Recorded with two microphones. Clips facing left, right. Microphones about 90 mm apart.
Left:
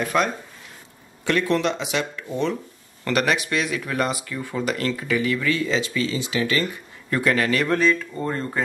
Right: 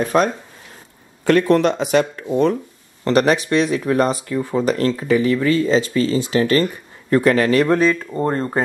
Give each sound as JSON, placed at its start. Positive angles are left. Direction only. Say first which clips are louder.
{"t": 0.0, "sound": "speech", "louder": "right 5 dB", "side_deg": -35}